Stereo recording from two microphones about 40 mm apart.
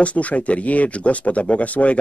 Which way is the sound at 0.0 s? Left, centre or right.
Left.